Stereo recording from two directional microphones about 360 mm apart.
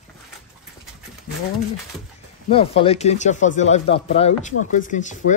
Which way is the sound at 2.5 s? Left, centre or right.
Centre.